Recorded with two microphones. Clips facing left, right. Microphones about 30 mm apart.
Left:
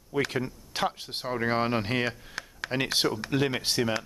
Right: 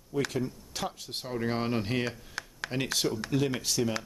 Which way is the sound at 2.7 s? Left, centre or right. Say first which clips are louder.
Left 3 dB; left.